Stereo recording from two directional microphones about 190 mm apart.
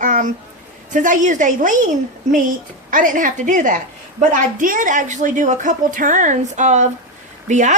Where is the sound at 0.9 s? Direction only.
40° right (ahead or behind).